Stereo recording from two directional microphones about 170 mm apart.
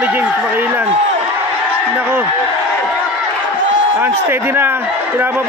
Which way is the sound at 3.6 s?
90° right.